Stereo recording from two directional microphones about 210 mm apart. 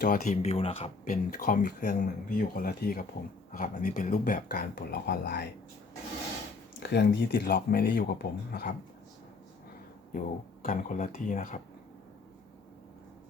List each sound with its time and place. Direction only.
0.0 s speech: 40° left (ahead or behind)
0.4 s speech: 30° left (ahead or behind); by 5.5 s 50° left (ahead or behind)
6.7 s speech: 55° left (ahead or behind)
10.6 s speech: 40° left (ahead or behind)